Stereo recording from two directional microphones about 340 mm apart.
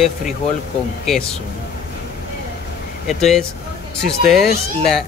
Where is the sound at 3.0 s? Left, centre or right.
Centre.